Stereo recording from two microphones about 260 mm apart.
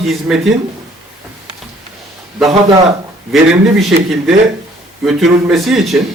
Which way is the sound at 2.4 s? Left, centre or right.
Centre.